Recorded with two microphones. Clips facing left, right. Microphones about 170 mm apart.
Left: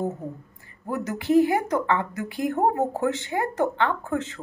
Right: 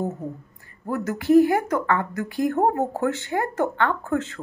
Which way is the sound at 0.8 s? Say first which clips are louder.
Right 3 dB; 15° left (ahead or behind).